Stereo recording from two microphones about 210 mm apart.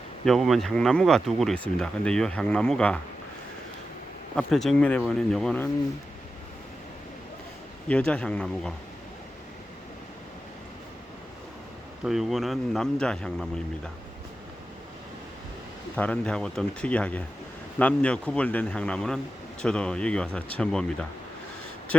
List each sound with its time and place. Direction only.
0.3 s speech: centre (ahead or behind)
4.4 s speech: centre (ahead or behind)
7.9 s speech: 5° left (ahead or behind)
12.0 s speech: centre (ahead or behind)
16.0 s speech: 5° left (ahead or behind)